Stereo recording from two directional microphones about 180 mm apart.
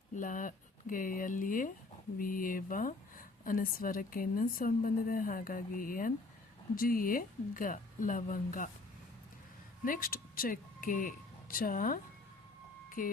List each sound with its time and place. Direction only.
0.2 s a woman's voice: 50° left (ahead or behind)
9.8 s speech: 50° left (ahead or behind)
13.0 s a woman's voice: 50° left (ahead or behind)